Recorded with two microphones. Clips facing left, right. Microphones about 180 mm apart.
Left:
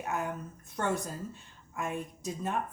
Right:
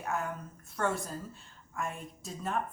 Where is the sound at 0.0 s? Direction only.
20° left (ahead or behind).